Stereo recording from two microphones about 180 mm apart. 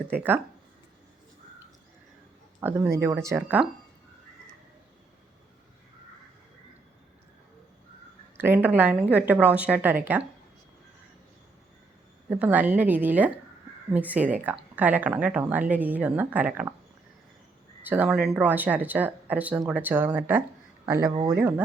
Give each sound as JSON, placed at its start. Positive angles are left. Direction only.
{"t": 0.1, "sound": "speech", "side_deg": -10}
{"t": 2.6, "sound": "speech", "side_deg": -15}
{"t": 8.4, "sound": "speech", "side_deg": -10}
{"t": 12.3, "sound": "speech", "side_deg": -10}
{"t": 17.8, "sound": "speech", "side_deg": -10}